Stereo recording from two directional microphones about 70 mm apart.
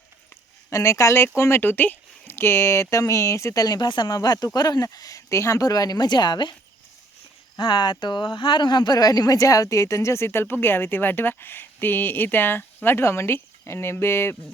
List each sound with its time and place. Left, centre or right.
0.7 s speech: left
7.7 s speech: left